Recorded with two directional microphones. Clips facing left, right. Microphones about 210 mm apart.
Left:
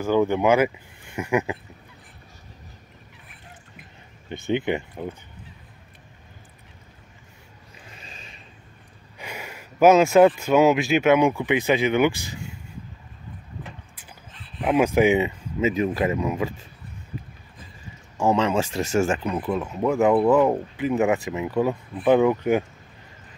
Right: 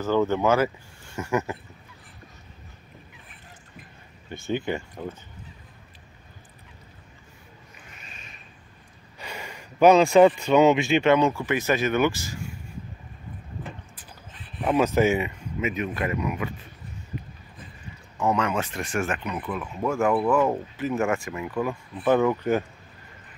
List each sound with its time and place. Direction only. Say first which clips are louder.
0.0 s speech: left 2 dB; 15° left (ahead or behind)
4.3 s speech: left 4 dB; 20° left (ahead or behind)
7.9 s a sound: left 5 dB; 30° left (ahead or behind)
9.2 s speech: left 1 dB; 10° left (ahead or behind)
14.6 s speech: left 2 dB; 10° left (ahead or behind)
15.1 s speech: left 5 dB; 25° left (ahead or behind)
18.1 s speech: left 4 dB; 25° left (ahead or behind)